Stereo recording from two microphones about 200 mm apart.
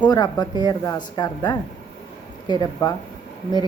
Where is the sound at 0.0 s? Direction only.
20° left (ahead or behind).